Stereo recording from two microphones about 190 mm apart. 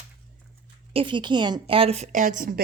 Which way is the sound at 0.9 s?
25° right (ahead or behind).